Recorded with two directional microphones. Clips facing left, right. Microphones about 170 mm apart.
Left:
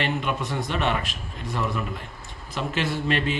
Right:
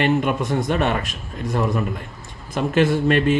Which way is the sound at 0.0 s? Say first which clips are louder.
Right 7 dB; 50° right (ahead or behind).